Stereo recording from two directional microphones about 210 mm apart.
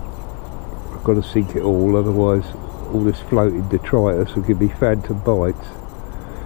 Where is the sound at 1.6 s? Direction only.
30° left (ahead or behind).